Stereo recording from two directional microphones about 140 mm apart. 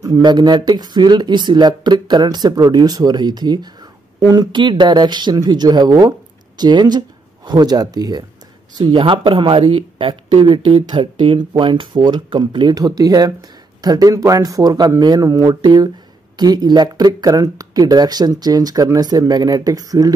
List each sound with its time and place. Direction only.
0.0 s speech: 30° right (ahead or behind)